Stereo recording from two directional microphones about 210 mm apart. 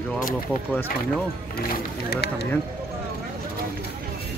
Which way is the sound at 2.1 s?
50° left (ahead or behind).